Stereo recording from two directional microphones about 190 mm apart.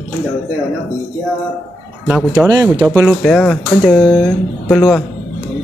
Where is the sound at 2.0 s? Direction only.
5° right (ahead or behind).